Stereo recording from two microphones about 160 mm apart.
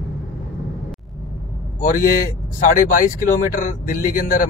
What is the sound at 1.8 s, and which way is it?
Speech, 60° left (ahead or behind).